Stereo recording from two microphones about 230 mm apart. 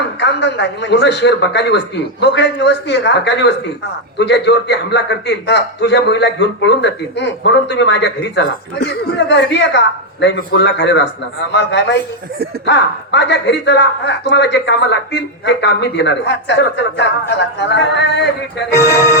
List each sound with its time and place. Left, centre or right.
0.2 s a man's voice: left
18.7 s speech: centre